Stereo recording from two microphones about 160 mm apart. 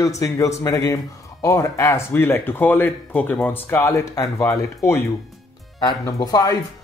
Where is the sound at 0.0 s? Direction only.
20° left (ahead or behind).